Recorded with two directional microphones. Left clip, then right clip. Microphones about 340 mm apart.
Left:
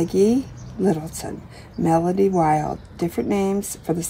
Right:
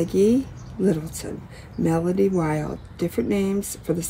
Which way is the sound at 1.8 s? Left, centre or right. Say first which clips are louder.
Left 3 dB; centre.